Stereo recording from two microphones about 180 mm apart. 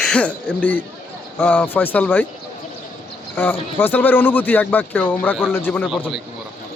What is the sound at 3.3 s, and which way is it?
Speech, 10° left (ahead or behind).